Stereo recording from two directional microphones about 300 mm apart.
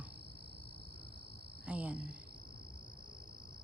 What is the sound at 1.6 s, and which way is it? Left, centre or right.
Speech, centre.